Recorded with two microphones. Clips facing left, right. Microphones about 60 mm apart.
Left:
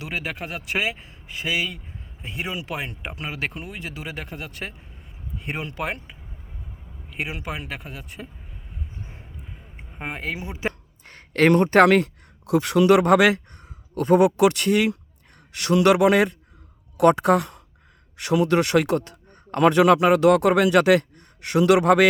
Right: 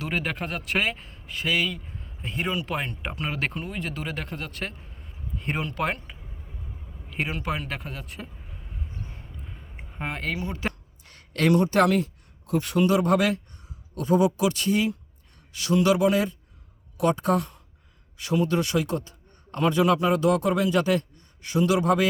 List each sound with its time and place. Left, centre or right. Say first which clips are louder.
0.0 s a man's voice: right 1 dB; centre
9.0 s a sound: even; centre
11.0 s speech: left 5 dB; left
13.6 s a man's voice: left 7 dB; left